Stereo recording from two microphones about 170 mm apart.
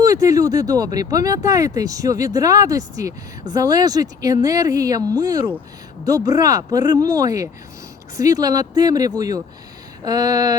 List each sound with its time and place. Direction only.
0.0 s speech: 20° right (ahead or behind)